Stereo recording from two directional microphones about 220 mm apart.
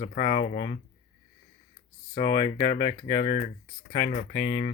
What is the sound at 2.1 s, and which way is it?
Speech, 20° left (ahead or behind).